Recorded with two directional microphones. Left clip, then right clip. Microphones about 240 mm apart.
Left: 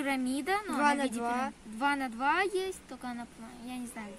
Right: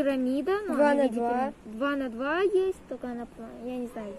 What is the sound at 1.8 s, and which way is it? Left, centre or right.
Speech, left.